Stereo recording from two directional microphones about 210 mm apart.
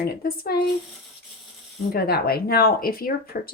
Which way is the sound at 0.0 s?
45° left (ahead or behind).